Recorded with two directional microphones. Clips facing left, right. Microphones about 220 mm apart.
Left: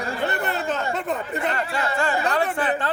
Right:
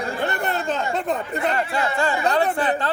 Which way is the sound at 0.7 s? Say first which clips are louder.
Right 2 dB; 35° right (ahead or behind).